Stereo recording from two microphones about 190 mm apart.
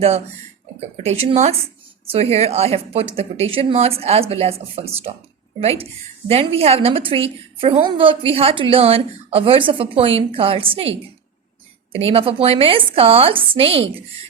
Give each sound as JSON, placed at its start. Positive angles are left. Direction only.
{"t": 0.8, "sound": "a woman's voice", "side_deg": -35}